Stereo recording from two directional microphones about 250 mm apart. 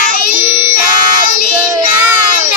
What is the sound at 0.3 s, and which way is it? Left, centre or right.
Child singing, left.